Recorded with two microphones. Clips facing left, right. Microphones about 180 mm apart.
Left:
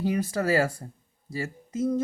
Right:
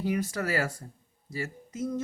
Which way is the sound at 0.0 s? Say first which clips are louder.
Left 3 dB; 30° left (ahead or behind).